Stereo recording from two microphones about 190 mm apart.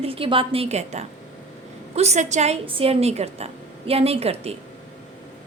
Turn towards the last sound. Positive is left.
turn(degrees=-30)  # may be behind; listen again after turning